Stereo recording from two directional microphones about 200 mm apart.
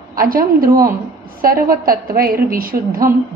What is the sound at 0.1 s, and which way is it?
A woman's voice, 45° right (ahead or behind).